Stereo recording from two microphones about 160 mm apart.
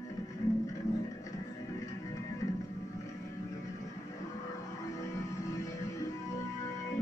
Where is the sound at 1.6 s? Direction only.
20° left (ahead or behind).